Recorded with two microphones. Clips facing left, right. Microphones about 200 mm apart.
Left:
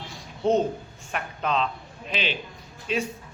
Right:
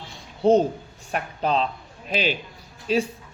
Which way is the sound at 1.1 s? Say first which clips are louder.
Right 3 dB; 35° right (ahead or behind).